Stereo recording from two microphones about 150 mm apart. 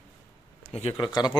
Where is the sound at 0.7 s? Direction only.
45° left (ahead or behind).